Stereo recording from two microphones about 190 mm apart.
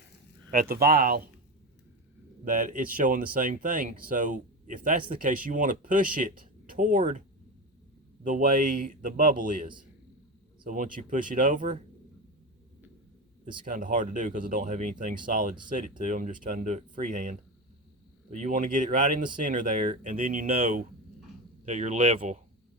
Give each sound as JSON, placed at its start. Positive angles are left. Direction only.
{"t": 0.5, "sound": "speech", "side_deg": -50}
{"t": 2.4, "sound": "speech", "side_deg": -45}
{"t": 8.2, "sound": "speech", "side_deg": -45}
{"t": 13.7, "sound": "speech", "side_deg": -45}